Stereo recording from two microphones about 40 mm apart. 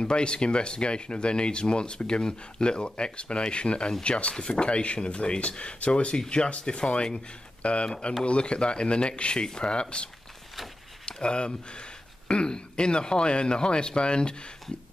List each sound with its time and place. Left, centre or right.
0.0 s speech: left
11.1 s speech: left